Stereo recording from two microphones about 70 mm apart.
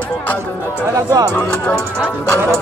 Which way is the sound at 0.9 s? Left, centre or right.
Right.